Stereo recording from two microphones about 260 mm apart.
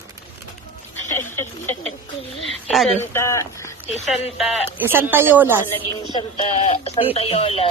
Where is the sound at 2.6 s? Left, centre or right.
Centre.